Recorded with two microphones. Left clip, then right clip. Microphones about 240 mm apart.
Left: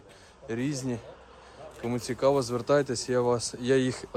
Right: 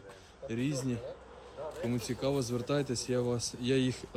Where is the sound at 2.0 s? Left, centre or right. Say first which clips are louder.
Left 6 dB; centre.